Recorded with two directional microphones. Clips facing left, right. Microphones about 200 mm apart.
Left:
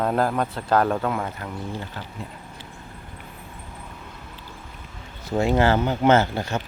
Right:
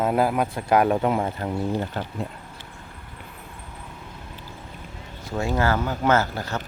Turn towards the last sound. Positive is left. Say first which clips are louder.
# left 3 dB
turn(degrees=25)  # may be behind; listen again after turning